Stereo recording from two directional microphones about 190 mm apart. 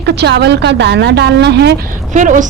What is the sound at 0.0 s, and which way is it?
A woman's voice, 65° right (ahead or behind).